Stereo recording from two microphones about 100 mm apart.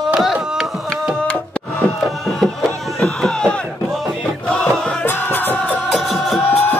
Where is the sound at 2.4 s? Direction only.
5° left (ahead or behind).